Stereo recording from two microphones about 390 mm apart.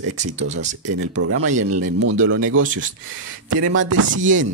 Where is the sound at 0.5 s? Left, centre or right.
Right.